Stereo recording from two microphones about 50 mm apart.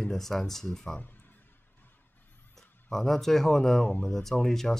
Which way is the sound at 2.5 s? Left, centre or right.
Centre.